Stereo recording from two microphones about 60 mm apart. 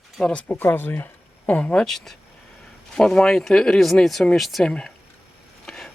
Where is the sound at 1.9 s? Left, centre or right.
Centre.